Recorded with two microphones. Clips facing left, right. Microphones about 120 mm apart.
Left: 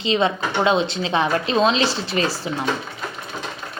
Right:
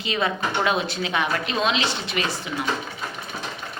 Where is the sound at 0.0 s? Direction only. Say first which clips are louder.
Left 5 dB; 25° left (ahead or behind).